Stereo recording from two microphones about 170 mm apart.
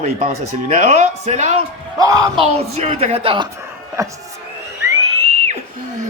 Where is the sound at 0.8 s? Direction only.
40° right (ahead or behind).